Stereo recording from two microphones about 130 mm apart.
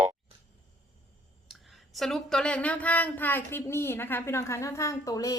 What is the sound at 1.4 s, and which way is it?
Speech, centre (ahead or behind).